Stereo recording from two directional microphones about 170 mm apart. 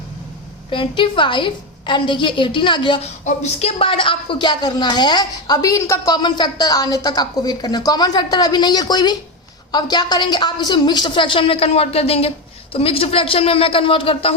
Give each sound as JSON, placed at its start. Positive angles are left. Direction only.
{"t": 0.7, "sound": "a woman's voice", "side_deg": 30}
{"t": 3.2, "sound": "a woman's voice", "side_deg": 40}